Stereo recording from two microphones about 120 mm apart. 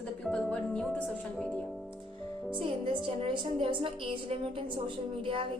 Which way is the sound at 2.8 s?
45° right (ahead or behind).